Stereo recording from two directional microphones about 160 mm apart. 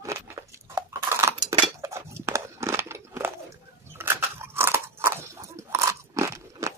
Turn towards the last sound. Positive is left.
turn(degrees=-20)  # may be behind; listen again after turning